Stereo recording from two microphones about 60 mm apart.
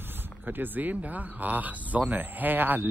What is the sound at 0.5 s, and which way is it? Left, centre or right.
Speech, right.